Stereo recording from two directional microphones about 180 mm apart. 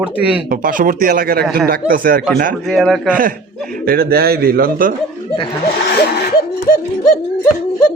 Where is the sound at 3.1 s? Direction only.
50° right (ahead or behind).